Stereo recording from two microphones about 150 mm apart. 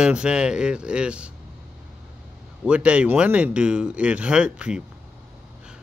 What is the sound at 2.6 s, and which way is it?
Speech, 5° right (ahead or behind).